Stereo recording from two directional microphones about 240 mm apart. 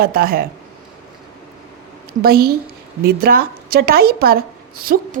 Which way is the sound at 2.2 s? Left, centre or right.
Right.